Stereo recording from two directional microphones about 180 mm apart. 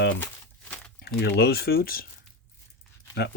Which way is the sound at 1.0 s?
65° left (ahead or behind).